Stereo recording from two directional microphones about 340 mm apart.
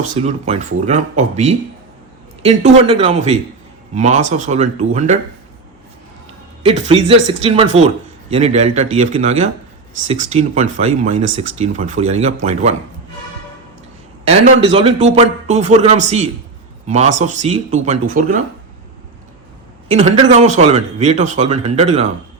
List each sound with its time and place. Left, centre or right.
0.0 s speech: centre
6.7 s speech: centre
14.3 s speech: centre
19.9 s speech: centre